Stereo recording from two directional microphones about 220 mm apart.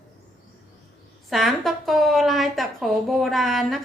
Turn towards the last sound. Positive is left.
turn(degrees=0)  # may be behind; listen again after turning